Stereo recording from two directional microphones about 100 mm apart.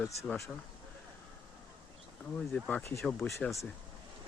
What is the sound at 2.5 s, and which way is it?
Speech, 10° left (ahead or behind).